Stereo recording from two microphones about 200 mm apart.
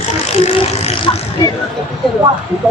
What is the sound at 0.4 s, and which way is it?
Speech, 30° left (ahead or behind).